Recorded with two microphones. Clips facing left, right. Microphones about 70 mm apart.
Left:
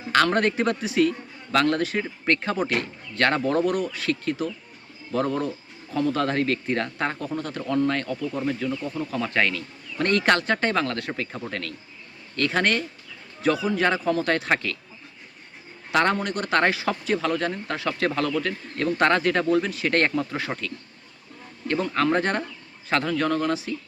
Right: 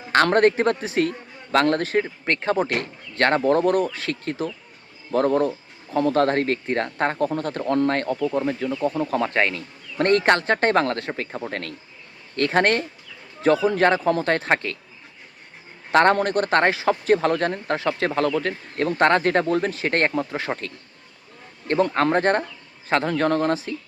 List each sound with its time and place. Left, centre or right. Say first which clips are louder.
0.1 s speech: right 4 dB; right
8.3 s speech: right 3 dB; right
8.8 s speech: right 6 dB; right
11.3 s speech: right 3 dB; right
12.4 s speech: right 4 dB; right
15.9 s a man's voice: right 5 dB; right
17.1 s speech: right 5 dB; right
17.8 s speech: right 2 dB; right
21.7 s speech: right 5 dB; right
21.9 s speech: even; right